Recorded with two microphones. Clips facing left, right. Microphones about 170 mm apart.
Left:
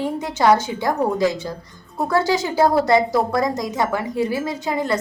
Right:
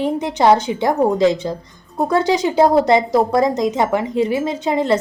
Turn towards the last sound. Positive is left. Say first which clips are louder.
# right 5 dB
turn(degrees=-20)  # may be behind; listen again after turning